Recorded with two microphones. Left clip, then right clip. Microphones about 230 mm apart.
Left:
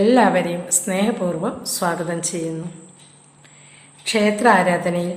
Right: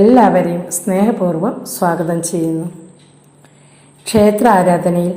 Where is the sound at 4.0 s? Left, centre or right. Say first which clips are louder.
Right 7 dB; centre.